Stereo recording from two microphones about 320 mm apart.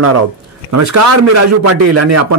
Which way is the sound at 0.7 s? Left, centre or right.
Right.